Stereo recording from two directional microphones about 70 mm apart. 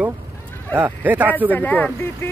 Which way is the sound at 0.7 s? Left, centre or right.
Right.